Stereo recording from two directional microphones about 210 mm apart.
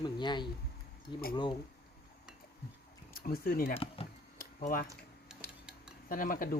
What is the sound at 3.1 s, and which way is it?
Speech, 45° left (ahead or behind).